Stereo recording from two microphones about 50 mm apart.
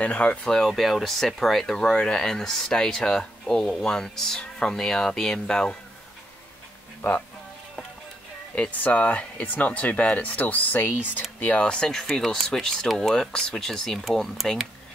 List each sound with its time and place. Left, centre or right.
0.0 s speech: left
0.5 s speech: centre
8.5 s speech: left
11.6 s speech: centre
12.0 s speech: centre
13.1 s speech: centre